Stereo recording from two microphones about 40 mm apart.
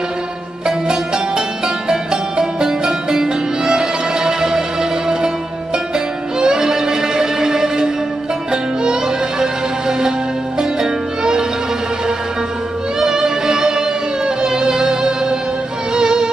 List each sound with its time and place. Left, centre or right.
0.7 s music: centre
13.0 s music: centre